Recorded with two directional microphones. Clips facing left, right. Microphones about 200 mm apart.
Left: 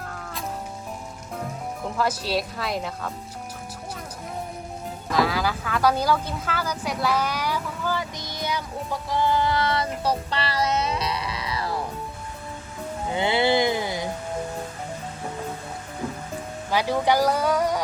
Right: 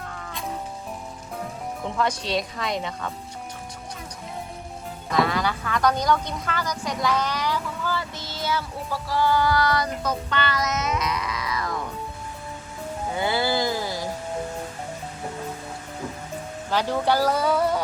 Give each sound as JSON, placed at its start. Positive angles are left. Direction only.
{"t": 0.0, "sound": "music", "side_deg": 0}
{"t": 1.4, "sound": "speech", "side_deg": 0}
{"t": 5.1, "sound": "speech", "side_deg": 0}
{"t": 13.1, "sound": "music", "side_deg": 20}
{"t": 16.6, "sound": "speech", "side_deg": 10}